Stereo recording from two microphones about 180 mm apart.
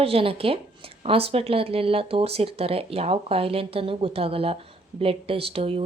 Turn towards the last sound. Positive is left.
turn(degrees=-30)  # may be behind; listen again after turning